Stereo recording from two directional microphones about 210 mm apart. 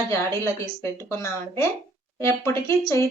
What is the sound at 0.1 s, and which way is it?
A woman's voice, 15° left (ahead or behind).